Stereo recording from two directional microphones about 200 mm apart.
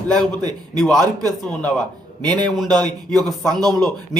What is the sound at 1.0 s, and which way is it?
Speech, 20° right (ahead or behind).